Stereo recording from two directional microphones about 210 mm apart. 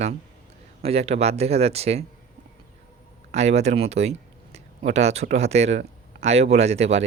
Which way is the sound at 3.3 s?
30° right (ahead or behind).